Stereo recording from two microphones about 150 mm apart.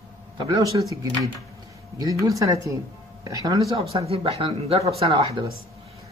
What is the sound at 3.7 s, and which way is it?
Speech, 40° right (ahead or behind).